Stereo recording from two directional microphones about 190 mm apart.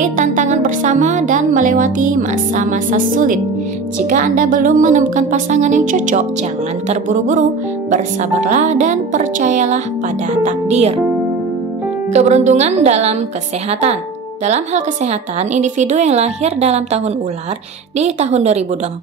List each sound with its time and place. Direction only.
0.0 s a woman's voice: 40° right (ahead or behind)
12.1 s a woman's voice: 35° right (ahead or behind)